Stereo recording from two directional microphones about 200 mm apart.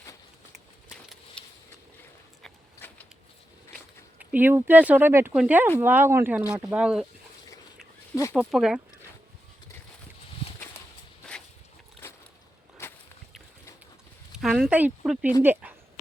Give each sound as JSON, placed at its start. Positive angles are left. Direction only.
{"t": 1.4, "sound": "a sound", "side_deg": 5}
{"t": 4.2, "sound": "speech", "side_deg": -10}
{"t": 8.1, "sound": "speech", "side_deg": 15}
{"t": 8.4, "sound": "speech", "side_deg": 0}
{"t": 14.3, "sound": "speech", "side_deg": 0}
{"t": 15.6, "sound": "a sound", "side_deg": -10}